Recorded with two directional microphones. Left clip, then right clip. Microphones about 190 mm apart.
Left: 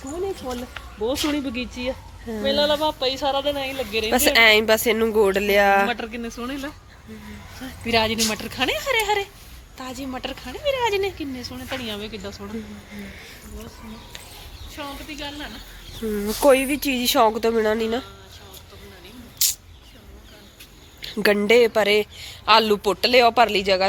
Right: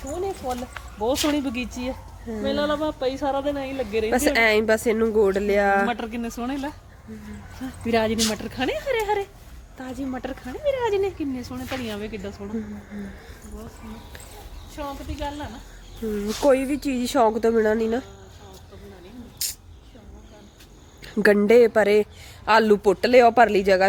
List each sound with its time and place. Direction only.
1.0 s speech: 70° right (ahead or behind); by 3.8 s 45° right (ahead or behind)
4.1 s speech: 15° right (ahead or behind)
5.9 s speech: 60° right (ahead or behind)
7.9 s speech: 45° right (ahead or behind)
8.3 s speech: 25° right (ahead or behind)
11.4 s speech: 60° right (ahead or behind)
14.8 s speech: 40° right (ahead or behind)
16.1 s speech: centre (ahead or behind); by 18.0 s 20° right (ahead or behind)
19.4 s a sound: 30° right (ahead or behind)
21.0 s speech: 30° right (ahead or behind)